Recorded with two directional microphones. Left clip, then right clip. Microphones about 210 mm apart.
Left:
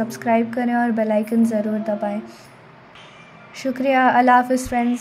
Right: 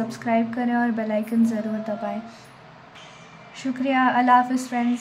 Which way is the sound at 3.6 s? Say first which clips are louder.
Left 5 dB; 20° left (ahead or behind).